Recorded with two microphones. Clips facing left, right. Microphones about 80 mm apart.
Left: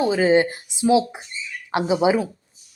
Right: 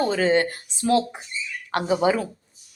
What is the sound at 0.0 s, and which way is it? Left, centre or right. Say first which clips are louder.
Speech: left 3 dB; centre.